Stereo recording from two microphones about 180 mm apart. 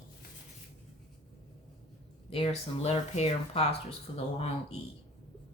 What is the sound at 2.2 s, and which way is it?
Speech, 30° left (ahead or behind).